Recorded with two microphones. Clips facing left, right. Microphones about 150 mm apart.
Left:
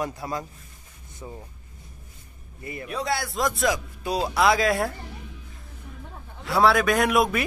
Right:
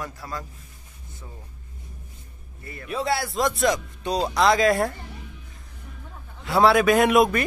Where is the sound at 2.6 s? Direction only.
15° left (ahead or behind).